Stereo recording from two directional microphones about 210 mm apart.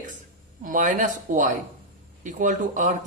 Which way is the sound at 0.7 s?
40° right (ahead or behind).